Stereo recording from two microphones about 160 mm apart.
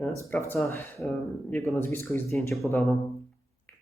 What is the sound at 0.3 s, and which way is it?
Speech, 10° left (ahead or behind).